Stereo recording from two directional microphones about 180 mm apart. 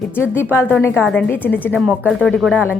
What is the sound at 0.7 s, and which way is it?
A woman's voice, 10° left (ahead or behind).